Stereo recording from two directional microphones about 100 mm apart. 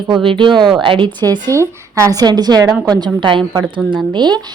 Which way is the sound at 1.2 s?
45° right (ahead or behind).